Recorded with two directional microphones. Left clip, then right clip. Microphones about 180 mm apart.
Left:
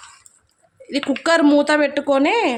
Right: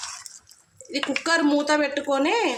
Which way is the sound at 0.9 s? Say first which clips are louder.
Left 5 dB; 60° left (ahead or behind).